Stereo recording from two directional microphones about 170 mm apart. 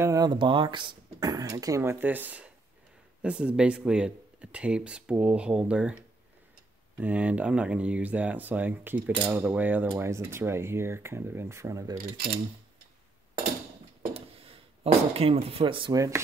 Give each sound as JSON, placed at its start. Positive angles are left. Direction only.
{"t": 0.0, "sound": "speech", "side_deg": -20}
{"t": 7.0, "sound": "speech", "side_deg": -10}
{"t": 12.0, "sound": "speech", "side_deg": -60}
{"t": 14.1, "sound": "a sound", "side_deg": -35}
{"t": 15.4, "sound": "speech", "side_deg": -35}